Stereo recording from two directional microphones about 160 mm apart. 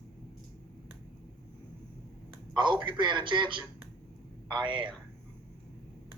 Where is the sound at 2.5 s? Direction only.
30° right (ahead or behind).